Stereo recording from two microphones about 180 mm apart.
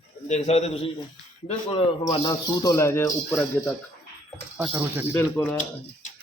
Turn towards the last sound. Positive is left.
turn(degrees=10)  # may be behind; listen again after turning